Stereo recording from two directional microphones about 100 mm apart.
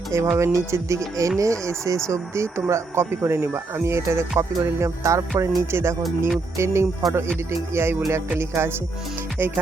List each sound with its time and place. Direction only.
0.1 s speech: 30° right (ahead or behind)
6.0 s speech: centre (ahead or behind)
7.5 s speech: 25° right (ahead or behind)